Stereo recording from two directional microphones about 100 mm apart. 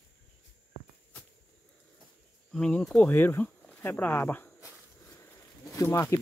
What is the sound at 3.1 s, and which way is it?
Speech, 20° left (ahead or behind).